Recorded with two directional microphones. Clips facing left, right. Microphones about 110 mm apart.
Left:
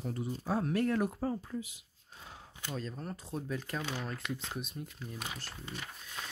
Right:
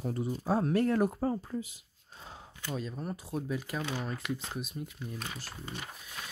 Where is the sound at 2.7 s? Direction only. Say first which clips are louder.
Right 3 dB; 10° right (ahead or behind).